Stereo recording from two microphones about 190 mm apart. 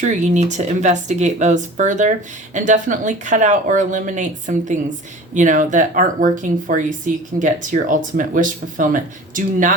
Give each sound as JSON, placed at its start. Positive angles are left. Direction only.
{"t": 0.0, "sound": "speech", "side_deg": -40}